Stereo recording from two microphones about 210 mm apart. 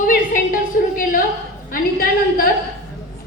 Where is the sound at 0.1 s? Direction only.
40° left (ahead or behind).